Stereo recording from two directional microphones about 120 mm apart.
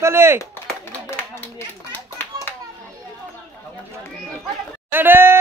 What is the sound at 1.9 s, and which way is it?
Clapping, 20° left (ahead or behind).